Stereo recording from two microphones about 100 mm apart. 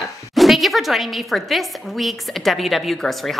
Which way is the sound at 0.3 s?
Centre (ahead or behind).